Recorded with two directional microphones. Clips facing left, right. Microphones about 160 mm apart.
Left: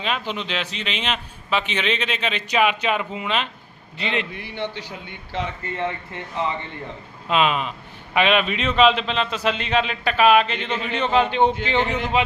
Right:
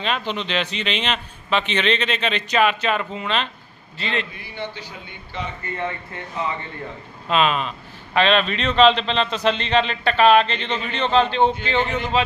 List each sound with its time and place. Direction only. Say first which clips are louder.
0.0 s a man's voice: right 1 dB; 5° left (ahead or behind)
4.4 s a man's voice: left 3 dB; 75° left (ahead or behind)
7.3 s a man's voice: right 1 dB; 15° left (ahead or behind)